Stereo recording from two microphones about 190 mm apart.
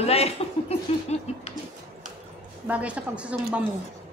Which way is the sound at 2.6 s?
5° right (ahead or behind).